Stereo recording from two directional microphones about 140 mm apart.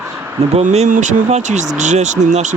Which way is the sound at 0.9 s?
60° right (ahead or behind).